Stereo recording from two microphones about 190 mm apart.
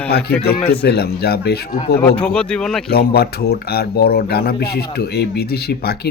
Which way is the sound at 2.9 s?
55° left (ahead or behind).